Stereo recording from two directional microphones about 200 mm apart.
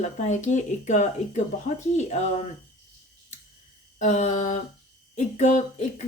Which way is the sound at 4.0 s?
35° left (ahead or behind).